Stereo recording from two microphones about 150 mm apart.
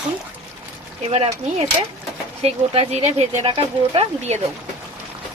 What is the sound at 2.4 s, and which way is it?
Speech, 40° right (ahead or behind).